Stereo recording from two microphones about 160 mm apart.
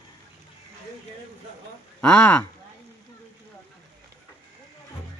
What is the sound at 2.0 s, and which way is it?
Speech, 10° left (ahead or behind).